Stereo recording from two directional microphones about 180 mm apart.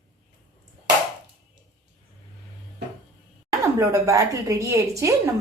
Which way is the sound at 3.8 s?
15° right (ahead or behind).